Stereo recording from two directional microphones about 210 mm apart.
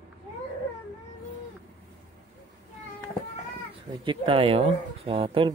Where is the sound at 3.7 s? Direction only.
25° right (ahead or behind).